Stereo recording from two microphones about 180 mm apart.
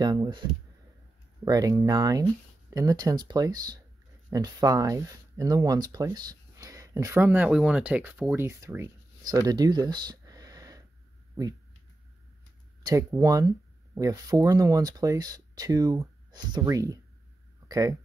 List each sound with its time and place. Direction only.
0.0 s speech: 20° right (ahead or behind)
12.8 s speech: 20° right (ahead or behind)